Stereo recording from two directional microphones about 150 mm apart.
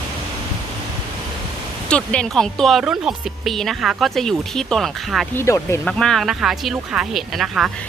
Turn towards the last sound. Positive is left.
turn(degrees=0)  # may be behind; listen again after turning